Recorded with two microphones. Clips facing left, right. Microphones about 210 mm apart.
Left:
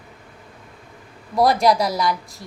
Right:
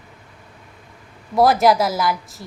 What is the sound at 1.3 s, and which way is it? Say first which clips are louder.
A woman's voice: right 2 dB; 5° right (ahead or behind).